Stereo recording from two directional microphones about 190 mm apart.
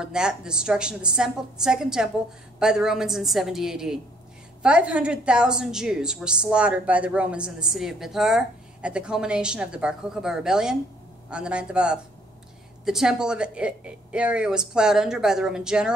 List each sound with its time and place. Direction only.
0.0 s a woman's voice: 5° right (ahead or behind)